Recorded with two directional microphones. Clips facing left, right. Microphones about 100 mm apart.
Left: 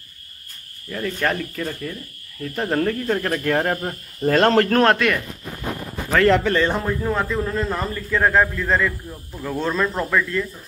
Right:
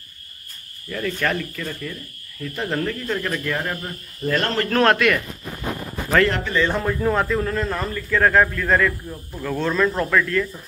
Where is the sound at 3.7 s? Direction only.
40° left (ahead or behind).